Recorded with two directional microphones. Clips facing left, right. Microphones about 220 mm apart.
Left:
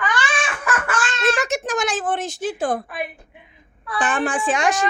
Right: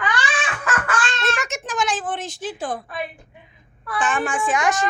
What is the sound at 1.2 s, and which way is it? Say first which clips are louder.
A woman's voice: left 5 dB; 35° left (ahead or behind).